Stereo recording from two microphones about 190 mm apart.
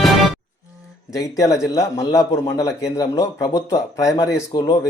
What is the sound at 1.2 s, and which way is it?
A man's voice, 15° left (ahead or behind).